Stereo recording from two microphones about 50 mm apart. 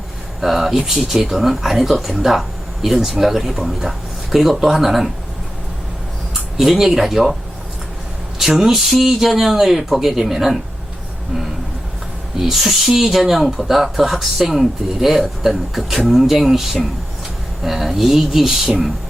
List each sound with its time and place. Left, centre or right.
0.4 s speech: centre
6.6 s speech: centre
8.4 s speech: centre
12.5 s speech: centre